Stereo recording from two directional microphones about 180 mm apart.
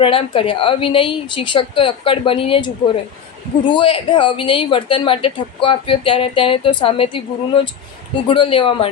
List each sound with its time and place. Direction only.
0.0 s speech: 30° left (ahead or behind)
3.8 s speech: 30° left (ahead or behind)